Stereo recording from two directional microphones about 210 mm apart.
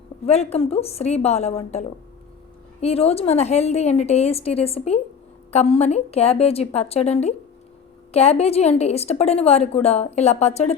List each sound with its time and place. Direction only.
0.3 s a woman's voice: 30° left (ahead or behind)
2.8 s a woman's voice: 30° left (ahead or behind)